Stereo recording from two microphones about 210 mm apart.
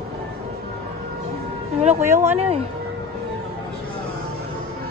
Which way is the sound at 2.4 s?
30° right (ahead or behind).